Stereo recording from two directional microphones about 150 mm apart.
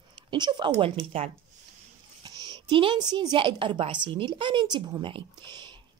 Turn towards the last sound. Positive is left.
turn(degrees=-30)  # may be behind; listen again after turning